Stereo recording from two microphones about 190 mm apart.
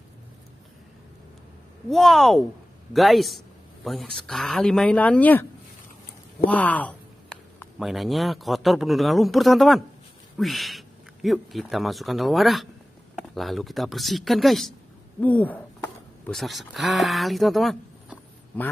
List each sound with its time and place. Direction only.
1.9 s speech: centre (ahead or behind)